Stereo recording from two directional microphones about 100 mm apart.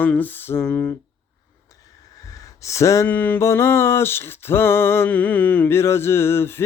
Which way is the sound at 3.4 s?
25° left (ahead or behind).